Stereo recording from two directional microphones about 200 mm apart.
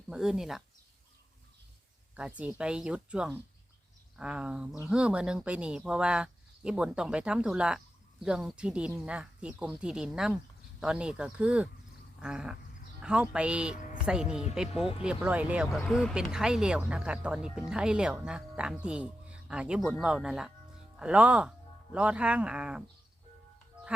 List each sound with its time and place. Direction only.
0.1 s speech: 5° right (ahead or behind)
2.1 s speech: 5° right (ahead or behind)